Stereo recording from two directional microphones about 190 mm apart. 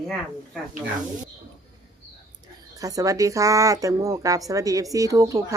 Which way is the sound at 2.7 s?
20° right (ahead or behind).